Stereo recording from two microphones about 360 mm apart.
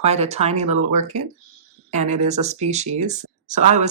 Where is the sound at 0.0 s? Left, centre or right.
Centre.